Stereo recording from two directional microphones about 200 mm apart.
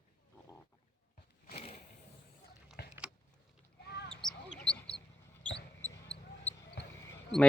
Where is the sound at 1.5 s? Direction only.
30° left (ahead or behind).